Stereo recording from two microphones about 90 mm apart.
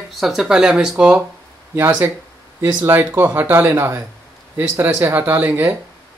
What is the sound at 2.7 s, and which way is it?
Speech, 20° right (ahead or behind).